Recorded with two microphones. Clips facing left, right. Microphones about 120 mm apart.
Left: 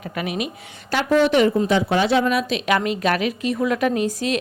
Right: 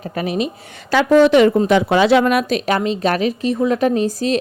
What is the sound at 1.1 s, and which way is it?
Speech, 90° right.